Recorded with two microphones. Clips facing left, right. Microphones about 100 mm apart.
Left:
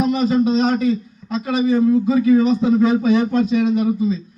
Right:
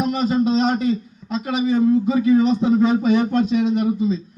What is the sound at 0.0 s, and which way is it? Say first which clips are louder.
Speech: left 2 dB; 20° right (ahead or behind).